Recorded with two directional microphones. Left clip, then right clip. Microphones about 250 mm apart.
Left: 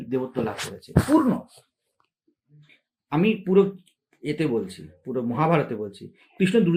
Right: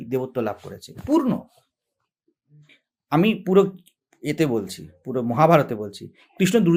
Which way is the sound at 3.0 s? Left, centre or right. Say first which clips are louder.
Right 3 dB; right.